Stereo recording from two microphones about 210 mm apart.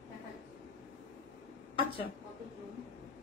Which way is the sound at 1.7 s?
25° left (ahead or behind).